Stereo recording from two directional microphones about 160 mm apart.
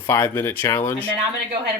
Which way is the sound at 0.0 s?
15° left (ahead or behind).